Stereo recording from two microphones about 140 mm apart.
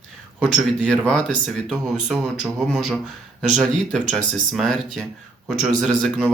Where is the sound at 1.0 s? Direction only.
5° left (ahead or behind).